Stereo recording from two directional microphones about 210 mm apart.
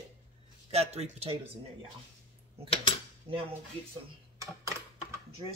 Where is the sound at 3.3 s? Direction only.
25° right (ahead or behind).